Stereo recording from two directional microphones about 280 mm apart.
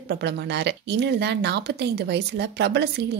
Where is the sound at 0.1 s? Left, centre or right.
Right.